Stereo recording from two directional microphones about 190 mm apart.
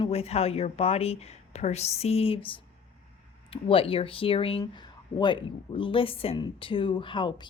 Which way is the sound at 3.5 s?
30° left (ahead or behind).